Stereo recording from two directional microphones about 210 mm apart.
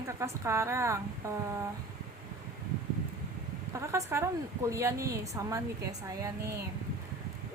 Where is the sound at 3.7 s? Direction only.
15° right (ahead or behind).